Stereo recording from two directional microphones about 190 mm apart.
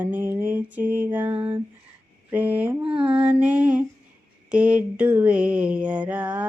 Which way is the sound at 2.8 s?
30° right (ahead or behind).